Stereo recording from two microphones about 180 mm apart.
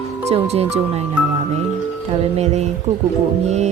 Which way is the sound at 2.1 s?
35° right (ahead or behind).